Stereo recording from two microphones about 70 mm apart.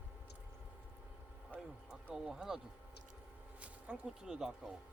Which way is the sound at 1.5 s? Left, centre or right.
Centre.